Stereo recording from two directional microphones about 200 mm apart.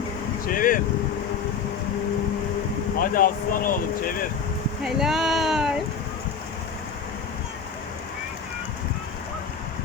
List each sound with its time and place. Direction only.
0.4 s speech: 45° left (ahead or behind)
3.0 s speech: 45° left (ahead or behind)
4.8 s speech: centre (ahead or behind)